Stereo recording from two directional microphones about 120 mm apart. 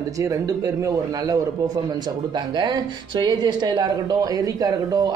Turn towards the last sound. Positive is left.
turn(degrees=-30)  # may be behind; listen again after turning